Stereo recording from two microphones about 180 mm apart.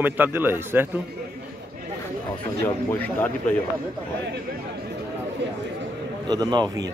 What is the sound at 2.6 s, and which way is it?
Speech, 10° left (ahead or behind).